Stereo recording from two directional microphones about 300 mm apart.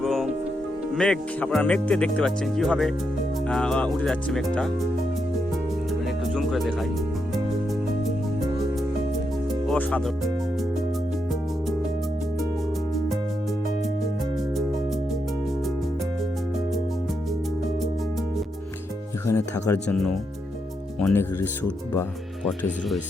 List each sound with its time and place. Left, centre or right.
0.0 s music: centre
0.9 s speech: centre
6.3 s music: centre
9.6 s speech: centre
19.2 s speech: centre